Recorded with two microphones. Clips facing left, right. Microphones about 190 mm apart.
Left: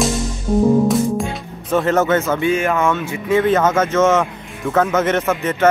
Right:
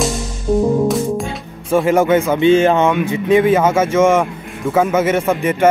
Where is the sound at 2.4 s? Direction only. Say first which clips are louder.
Right 6 dB; 25° right (ahead or behind).